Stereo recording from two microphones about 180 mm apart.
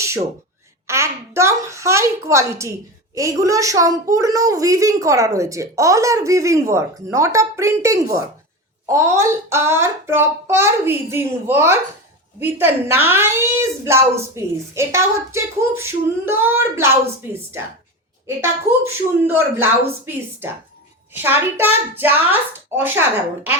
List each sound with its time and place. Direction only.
0.0 s a sound: 15° right (ahead or behind)
0.9 s a woman's voice: 15° right (ahead or behind)
19.3 s a woman's voice: 10° right (ahead or behind)
21.2 s a woman's voice: 10° right (ahead or behind)